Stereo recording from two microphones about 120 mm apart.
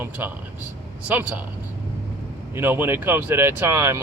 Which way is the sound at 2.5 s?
20° right (ahead or behind).